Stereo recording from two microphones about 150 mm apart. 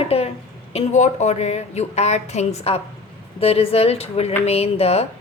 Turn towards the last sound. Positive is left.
turn(degrees=45)  # may be behind; listen again after turning